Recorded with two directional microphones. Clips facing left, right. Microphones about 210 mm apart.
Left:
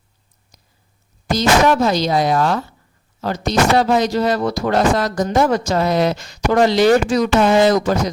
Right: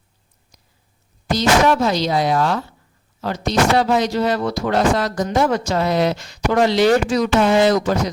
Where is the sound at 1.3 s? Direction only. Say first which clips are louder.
Left 1 dB; 45° left (ahead or behind).